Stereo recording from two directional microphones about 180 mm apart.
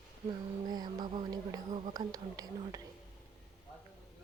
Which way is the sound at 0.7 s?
25° right (ahead or behind).